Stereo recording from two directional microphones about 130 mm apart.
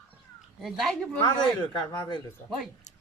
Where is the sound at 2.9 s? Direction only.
70° left (ahead or behind).